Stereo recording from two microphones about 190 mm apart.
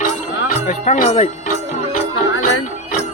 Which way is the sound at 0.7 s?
40° left (ahead or behind).